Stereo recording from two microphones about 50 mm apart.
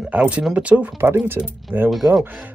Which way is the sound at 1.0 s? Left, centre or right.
Right.